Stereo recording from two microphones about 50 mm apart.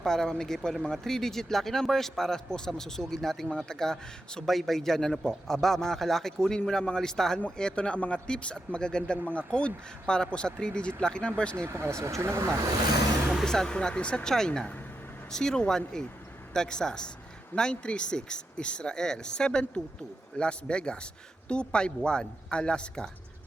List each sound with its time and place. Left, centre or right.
0.0 s speech: centre
11.5 s speech: right
13.4 s speech: centre